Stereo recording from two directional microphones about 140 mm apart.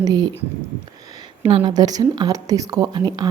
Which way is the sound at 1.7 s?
30° right (ahead or behind).